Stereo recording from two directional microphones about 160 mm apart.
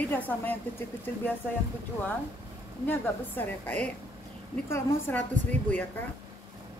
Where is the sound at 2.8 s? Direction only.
10° left (ahead or behind).